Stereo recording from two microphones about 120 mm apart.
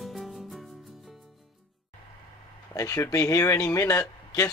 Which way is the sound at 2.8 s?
25° left (ahead or behind).